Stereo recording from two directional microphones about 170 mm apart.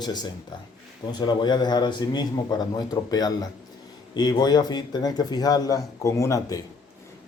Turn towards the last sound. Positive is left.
turn(degrees=20)  # may be behind; listen again after turning